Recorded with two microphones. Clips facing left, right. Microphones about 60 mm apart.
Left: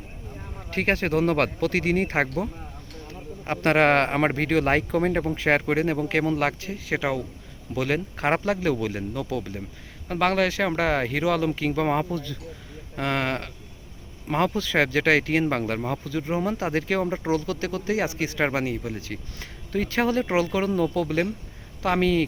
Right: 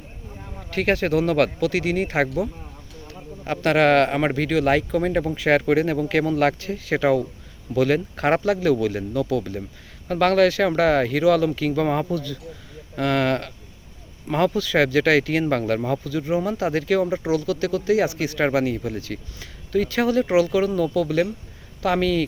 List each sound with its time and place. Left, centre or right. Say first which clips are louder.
0.7 s a man's voice: right 3 dB; left
12.1 s speech: right 4 dB; left
16.0 s speech: right 3 dB; left